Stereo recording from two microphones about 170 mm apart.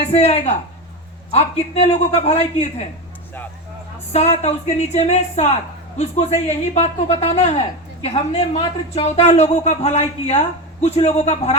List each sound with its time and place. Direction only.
0.1 s speech: 40° left (ahead or behind)
4.1 s speech: 40° left (ahead or behind)